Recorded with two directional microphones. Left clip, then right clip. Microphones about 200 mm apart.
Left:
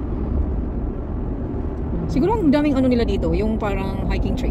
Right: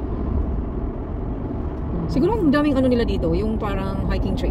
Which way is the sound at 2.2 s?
20° left (ahead or behind).